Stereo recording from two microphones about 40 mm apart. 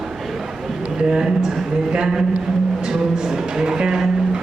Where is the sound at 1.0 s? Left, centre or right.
Centre.